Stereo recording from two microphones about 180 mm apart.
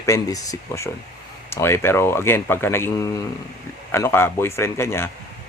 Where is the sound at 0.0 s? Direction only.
20° left (ahead or behind).